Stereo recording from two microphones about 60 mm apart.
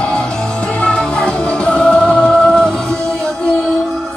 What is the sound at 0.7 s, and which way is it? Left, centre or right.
Music, centre.